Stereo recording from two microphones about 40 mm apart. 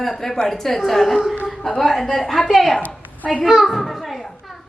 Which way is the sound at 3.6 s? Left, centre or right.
Centre.